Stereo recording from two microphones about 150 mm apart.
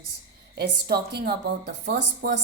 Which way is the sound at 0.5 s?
90° right.